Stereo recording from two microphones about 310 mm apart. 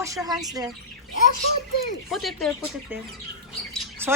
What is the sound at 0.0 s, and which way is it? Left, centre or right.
Speech, centre.